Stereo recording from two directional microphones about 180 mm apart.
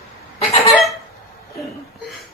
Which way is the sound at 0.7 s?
Centre (ahead or behind).